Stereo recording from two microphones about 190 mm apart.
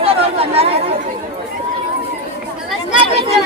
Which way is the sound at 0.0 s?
30° right (ahead or behind).